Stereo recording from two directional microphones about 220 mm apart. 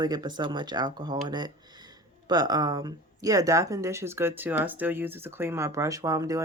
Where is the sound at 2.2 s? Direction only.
20° right (ahead or behind).